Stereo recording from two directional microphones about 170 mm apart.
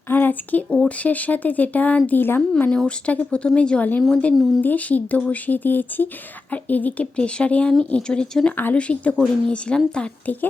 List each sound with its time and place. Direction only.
0.1 s speech: 10° left (ahead or behind)